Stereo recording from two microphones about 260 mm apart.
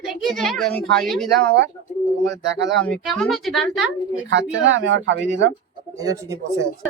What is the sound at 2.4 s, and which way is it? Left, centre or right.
Speech, right.